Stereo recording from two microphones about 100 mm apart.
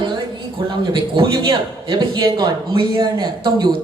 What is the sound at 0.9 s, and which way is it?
A man's voice, 55° right (ahead or behind).